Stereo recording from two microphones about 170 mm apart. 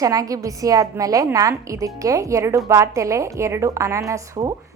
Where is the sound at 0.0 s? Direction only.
20° right (ahead or behind).